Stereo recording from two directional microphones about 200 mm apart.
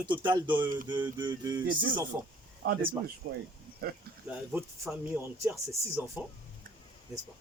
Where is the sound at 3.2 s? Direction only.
55° right (ahead or behind).